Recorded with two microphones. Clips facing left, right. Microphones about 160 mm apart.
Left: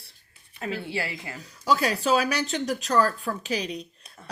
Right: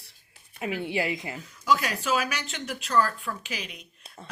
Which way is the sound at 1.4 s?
35° left (ahead or behind).